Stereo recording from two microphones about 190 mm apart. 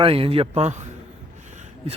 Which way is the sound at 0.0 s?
30° right (ahead or behind).